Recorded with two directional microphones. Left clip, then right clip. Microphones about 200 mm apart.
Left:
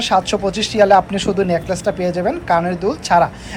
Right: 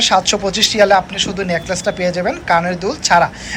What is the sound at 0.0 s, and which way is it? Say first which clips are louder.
Speech: right 2 dB; 5° left (ahead or behind).